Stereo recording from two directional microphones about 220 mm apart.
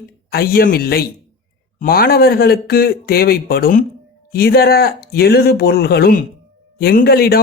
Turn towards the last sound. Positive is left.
turn(degrees=45)  # may be behind; listen again after turning